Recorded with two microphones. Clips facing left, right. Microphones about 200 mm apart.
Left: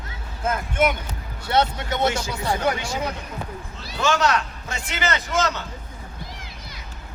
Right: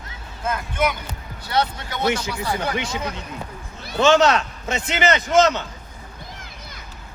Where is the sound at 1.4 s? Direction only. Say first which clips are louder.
Left 2 dB; 25° left (ahead or behind).